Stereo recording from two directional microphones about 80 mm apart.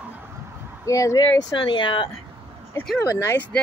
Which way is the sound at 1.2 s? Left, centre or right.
Left.